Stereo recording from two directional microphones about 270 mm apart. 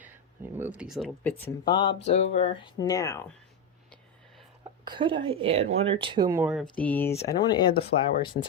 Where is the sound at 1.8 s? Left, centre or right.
Left.